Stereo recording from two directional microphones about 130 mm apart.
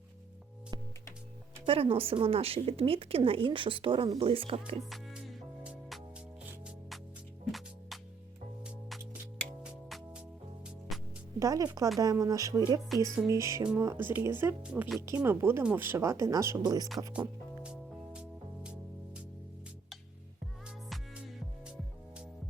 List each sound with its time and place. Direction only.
1.6 s speech: 45° right (ahead or behind)
4.9 s music: 5° right (ahead or behind)
9.9 s music: 5° right (ahead or behind)
11.3 s speech: 25° right (ahead or behind)
14.6 s speech: 5° right (ahead or behind)
15.0 s speech: 20° right (ahead or behind)
17.1 s music: 10° right (ahead or behind)